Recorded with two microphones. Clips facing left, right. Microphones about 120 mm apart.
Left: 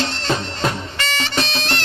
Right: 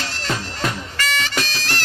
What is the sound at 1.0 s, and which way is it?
Bagpipes, 30° left (ahead or behind).